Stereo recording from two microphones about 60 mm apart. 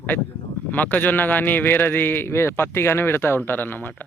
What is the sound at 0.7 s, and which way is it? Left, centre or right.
Speech, left.